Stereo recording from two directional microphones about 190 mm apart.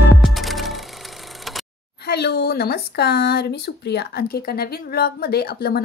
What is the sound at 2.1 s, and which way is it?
Speech, 60° left (ahead or behind).